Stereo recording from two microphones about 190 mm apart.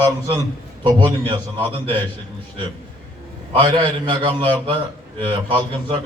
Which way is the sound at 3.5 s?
25° right (ahead or behind).